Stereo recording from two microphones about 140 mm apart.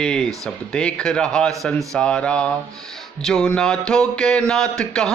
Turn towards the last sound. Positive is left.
turn(degrees=5)  # may be behind; listen again after turning